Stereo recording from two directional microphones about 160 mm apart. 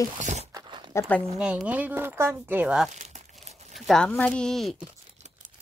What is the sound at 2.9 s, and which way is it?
Crumpling, 45° right (ahead or behind).